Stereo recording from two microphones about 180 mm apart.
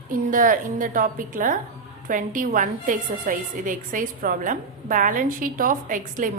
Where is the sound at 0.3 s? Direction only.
50° right (ahead or behind).